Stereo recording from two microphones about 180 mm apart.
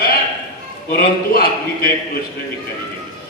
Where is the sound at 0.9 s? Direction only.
55° left (ahead or behind).